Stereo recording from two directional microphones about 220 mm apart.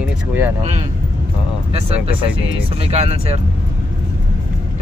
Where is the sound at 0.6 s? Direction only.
30° right (ahead or behind).